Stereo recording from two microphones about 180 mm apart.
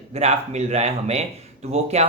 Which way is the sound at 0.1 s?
40° right (ahead or behind).